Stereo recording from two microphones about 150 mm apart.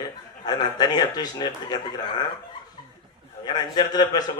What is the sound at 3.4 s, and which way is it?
Speech, 30° left (ahead or behind).